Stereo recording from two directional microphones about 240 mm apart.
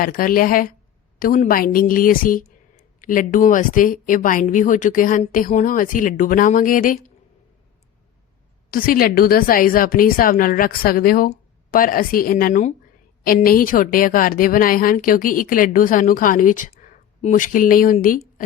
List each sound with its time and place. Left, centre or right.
0.0 s a woman's voice: left
8.7 s a woman's voice: left